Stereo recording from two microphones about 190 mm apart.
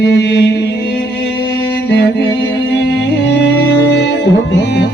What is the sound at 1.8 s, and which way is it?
Music, 60° left (ahead or behind).